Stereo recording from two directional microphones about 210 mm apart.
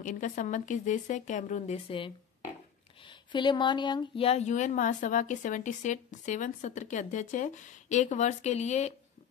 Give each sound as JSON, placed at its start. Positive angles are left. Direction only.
{"t": 0.0, "sound": "speech", "side_deg": 35}